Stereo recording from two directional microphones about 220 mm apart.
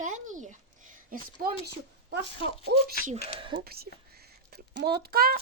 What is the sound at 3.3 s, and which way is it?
Speech, 25° right (ahead or behind).